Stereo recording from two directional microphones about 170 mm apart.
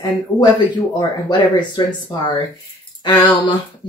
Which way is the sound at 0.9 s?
25° left (ahead or behind).